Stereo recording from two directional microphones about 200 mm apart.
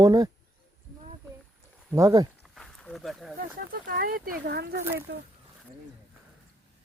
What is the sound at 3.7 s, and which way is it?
Speech, 50° right (ahead or behind).